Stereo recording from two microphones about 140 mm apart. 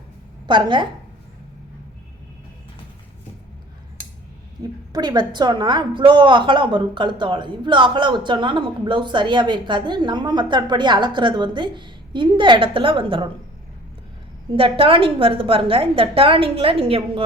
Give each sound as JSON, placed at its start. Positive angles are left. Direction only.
{"t": 0.4, "sound": "a woman's voice", "side_deg": -35}
{"t": 4.9, "sound": "a woman's voice", "side_deg": -30}
{"t": 14.5, "sound": "a woman's voice", "side_deg": -40}